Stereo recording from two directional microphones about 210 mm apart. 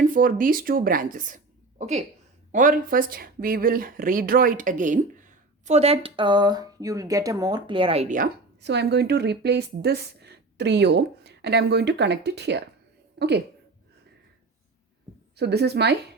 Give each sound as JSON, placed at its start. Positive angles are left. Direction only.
{"t": 0.0, "sound": "speech", "side_deg": -40}
{"t": 8.6, "sound": "speech", "side_deg": -55}
{"t": 15.4, "sound": "speech", "side_deg": -50}